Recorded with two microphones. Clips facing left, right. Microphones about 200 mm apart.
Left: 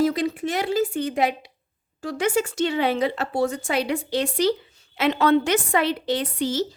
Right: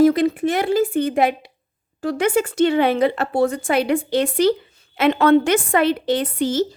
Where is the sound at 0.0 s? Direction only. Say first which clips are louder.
Right 7 dB; 55° right (ahead or behind).